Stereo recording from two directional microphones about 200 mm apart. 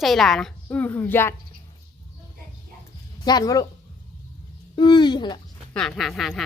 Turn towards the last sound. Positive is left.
turn(degrees=0)  # may be behind; listen again after turning